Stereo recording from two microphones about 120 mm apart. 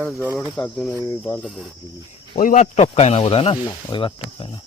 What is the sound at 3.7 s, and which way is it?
Speech, 45° left (ahead or behind).